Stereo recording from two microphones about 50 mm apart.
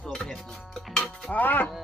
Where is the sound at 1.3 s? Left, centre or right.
Left.